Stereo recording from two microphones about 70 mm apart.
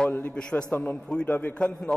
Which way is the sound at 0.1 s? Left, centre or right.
Centre.